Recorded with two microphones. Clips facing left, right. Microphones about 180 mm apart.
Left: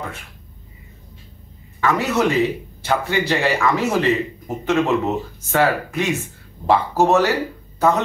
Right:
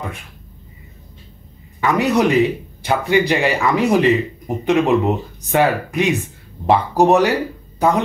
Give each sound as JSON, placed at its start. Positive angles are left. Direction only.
{"t": 1.8, "sound": "speech", "side_deg": -15}